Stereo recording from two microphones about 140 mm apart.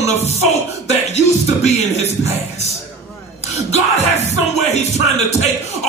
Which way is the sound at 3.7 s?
50° left (ahead or behind).